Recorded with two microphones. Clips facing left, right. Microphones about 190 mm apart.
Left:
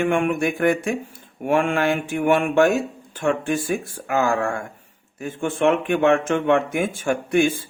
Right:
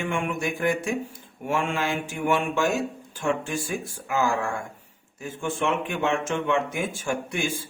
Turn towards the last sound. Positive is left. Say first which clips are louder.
# left 8 dB
turn(degrees=55)  # may be behind; listen again after turning